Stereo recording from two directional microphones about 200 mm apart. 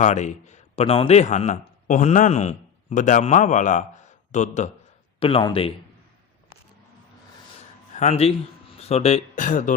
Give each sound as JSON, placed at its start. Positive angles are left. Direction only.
{"t": 0.0, "sound": "a man's voice", "side_deg": 35}
{"t": 5.2, "sound": "a man's voice", "side_deg": 25}
{"t": 7.9, "sound": "speech", "side_deg": 30}